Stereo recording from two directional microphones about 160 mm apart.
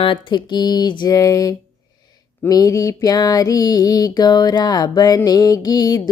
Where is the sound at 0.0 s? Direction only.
30° left (ahead or behind).